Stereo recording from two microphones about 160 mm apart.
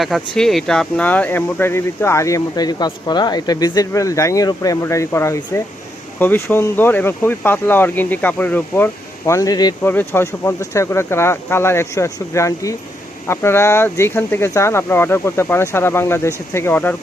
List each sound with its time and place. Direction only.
0.0 s speech: centre (ahead or behind); by 9.7 s 25° left (ahead or behind)
9.8 s speech: 10° left (ahead or behind)